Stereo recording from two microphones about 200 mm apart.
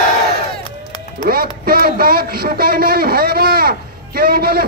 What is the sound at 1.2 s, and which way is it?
Speech, 50° right (ahead or behind).